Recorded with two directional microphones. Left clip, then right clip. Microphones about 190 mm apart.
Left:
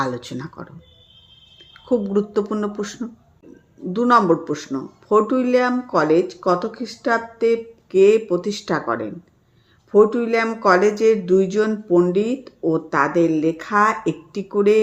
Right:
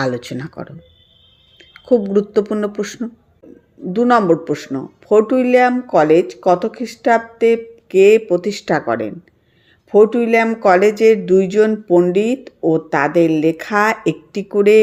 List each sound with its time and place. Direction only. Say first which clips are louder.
0.0 s speech: right 4 dB; 10° right (ahead or behind)